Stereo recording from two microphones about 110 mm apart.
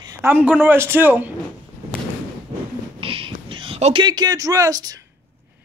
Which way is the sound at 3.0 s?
50° right (ahead or behind).